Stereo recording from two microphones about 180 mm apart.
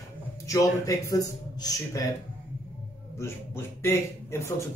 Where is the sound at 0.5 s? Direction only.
20° left (ahead or behind).